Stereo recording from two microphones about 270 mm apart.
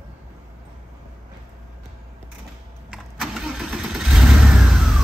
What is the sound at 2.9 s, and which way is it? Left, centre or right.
Vehicle, centre.